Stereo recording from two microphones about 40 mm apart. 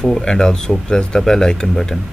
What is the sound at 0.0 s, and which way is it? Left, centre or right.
Speech, centre.